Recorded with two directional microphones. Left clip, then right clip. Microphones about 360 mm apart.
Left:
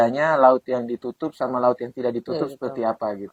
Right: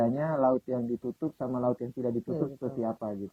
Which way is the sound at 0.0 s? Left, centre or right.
Centre.